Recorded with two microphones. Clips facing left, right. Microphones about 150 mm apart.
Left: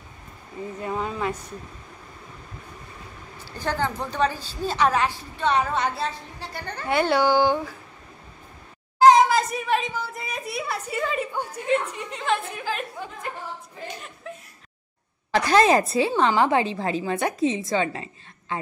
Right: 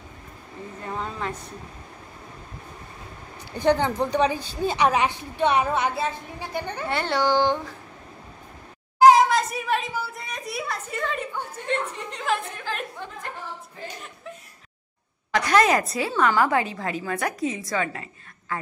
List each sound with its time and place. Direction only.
0.9 s a woman's voice: 10° left (ahead or behind)
3.5 s a woman's voice: 20° right (ahead or behind)
6.9 s speech: 10° left (ahead or behind)
9.0 s a child's voice: centre (ahead or behind)
15.3 s a woman's voice: 30° left (ahead or behind)